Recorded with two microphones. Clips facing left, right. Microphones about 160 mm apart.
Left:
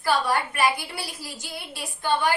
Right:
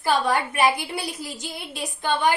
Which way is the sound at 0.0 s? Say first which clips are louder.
Right 2 dB; 20° right (ahead or behind).